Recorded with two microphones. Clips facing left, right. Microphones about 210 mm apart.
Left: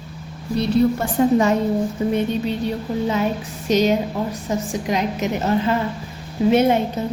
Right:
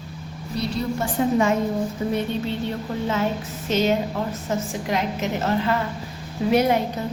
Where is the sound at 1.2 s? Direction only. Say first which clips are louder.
Left 6 dB; 45° left (ahead or behind).